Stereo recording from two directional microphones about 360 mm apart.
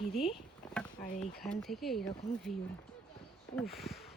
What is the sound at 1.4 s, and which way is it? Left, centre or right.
Speech, centre.